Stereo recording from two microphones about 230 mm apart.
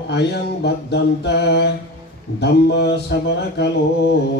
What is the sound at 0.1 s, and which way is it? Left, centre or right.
Mantra, left.